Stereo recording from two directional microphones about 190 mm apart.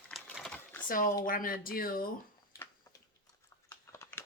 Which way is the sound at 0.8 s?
50° left (ahead or behind).